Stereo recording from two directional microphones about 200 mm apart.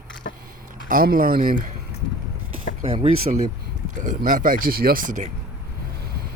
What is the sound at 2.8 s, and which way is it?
Speech, 30° right (ahead or behind).